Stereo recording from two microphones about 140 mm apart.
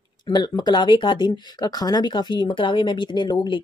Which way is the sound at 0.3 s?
30° left (ahead or behind).